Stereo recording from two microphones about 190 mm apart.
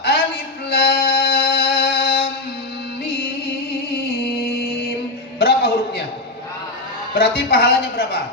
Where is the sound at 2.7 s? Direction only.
60° left (ahead or behind).